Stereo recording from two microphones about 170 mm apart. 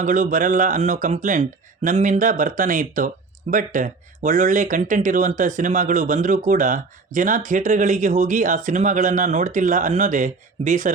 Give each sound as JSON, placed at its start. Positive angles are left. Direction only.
{"t": 0.0, "sound": "speech", "side_deg": -50}